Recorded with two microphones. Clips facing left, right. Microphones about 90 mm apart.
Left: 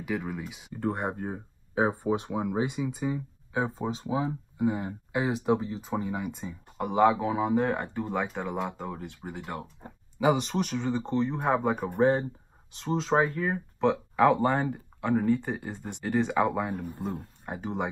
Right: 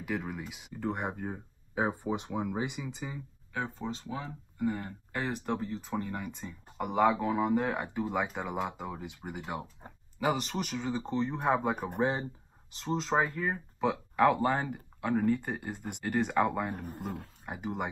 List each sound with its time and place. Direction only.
0.0 s speech: centre (ahead or behind)
0.7 s speech: 15° left (ahead or behind); by 9.9 s 10° right (ahead or behind)
10.1 s speech: centre (ahead or behind)
11.4 s speech: centre (ahead or behind)